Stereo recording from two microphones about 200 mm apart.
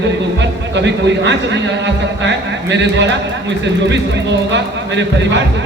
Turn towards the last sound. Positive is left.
turn(degrees=-60)  # may be behind; listen again after turning